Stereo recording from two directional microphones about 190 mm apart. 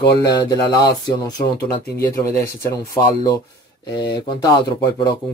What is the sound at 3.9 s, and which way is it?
Speech, 25° left (ahead or behind).